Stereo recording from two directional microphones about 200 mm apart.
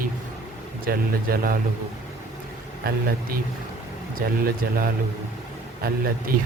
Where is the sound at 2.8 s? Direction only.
45° right (ahead or behind).